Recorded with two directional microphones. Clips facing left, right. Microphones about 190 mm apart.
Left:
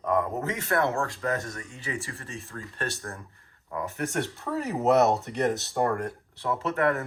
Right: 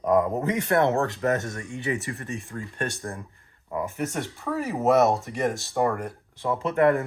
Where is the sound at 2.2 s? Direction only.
15° right (ahead or behind).